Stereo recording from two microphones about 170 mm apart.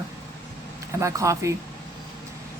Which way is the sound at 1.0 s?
15° right (ahead or behind).